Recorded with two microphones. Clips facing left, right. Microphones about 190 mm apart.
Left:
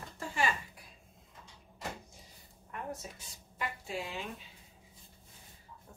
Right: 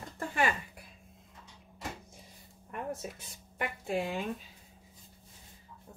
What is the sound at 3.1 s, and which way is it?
Speech, 55° right (ahead or behind).